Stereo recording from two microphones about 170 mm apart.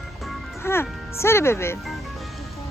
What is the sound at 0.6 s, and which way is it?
Speech, 15° left (ahead or behind).